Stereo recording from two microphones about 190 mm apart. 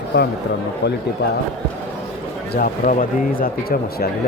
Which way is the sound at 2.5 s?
45° left (ahead or behind).